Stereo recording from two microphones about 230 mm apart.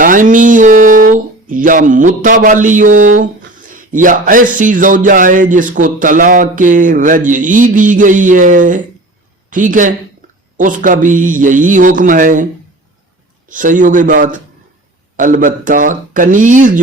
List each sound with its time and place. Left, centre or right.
0.0 s speech: right
13.5 s speech: right